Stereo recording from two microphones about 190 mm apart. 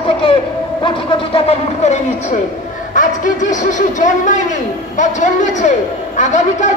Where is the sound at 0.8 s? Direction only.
25° left (ahead or behind).